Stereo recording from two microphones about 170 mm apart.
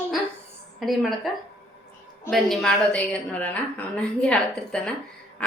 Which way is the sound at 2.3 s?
Centre (ahead or behind).